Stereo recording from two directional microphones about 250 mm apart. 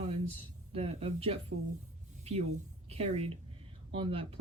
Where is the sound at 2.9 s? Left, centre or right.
Right.